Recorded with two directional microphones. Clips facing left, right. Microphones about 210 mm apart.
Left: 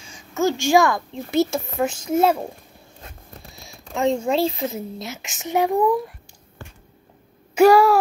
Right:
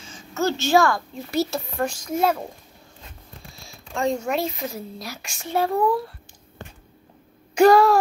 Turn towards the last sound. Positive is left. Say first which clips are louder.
# left 1 dB
turn(degrees=10)  # may be behind; listen again after turning